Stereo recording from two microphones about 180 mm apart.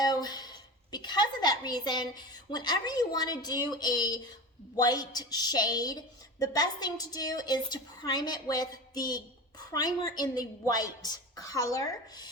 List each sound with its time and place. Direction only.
0.0 s a woman's voice: 20° left (ahead or behind)